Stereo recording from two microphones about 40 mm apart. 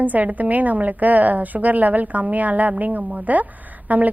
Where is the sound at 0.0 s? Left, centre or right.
Right.